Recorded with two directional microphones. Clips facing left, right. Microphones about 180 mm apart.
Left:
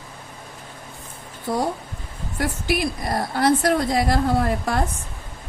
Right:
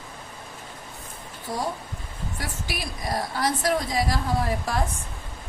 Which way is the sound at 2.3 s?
60° left (ahead or behind).